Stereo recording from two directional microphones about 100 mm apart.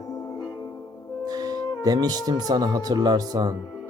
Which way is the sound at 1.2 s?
40° right (ahead or behind).